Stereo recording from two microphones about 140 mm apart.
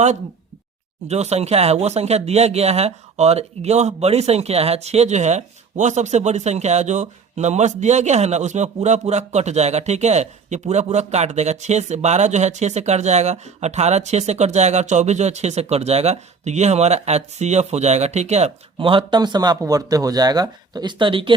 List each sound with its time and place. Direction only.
1.0 s speech: 50° right (ahead or behind)